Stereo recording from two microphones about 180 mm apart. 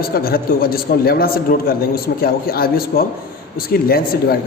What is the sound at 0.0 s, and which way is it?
A man's voice, 55° left (ahead or behind).